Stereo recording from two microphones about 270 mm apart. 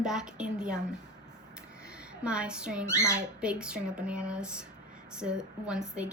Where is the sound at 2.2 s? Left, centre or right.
Centre.